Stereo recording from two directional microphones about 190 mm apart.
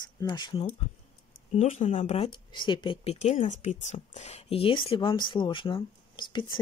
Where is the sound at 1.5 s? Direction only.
35° left (ahead or behind).